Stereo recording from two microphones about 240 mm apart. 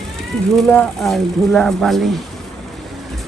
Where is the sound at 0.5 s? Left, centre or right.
Centre.